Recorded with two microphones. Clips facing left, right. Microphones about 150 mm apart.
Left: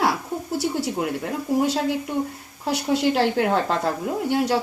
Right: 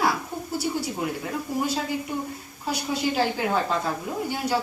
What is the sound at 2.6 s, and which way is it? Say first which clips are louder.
A woman's voice: left 5 dB; 75° left (ahead or behind).